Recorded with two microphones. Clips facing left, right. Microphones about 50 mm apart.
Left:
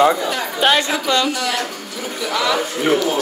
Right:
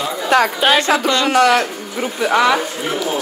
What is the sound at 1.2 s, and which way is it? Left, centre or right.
Speech, right.